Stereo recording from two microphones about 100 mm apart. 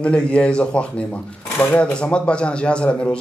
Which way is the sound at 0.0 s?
10° left (ahead or behind).